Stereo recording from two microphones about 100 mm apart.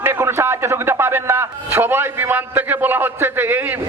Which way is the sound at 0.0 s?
25° right (ahead or behind).